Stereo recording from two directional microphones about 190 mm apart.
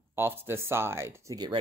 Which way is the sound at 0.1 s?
10° right (ahead or behind).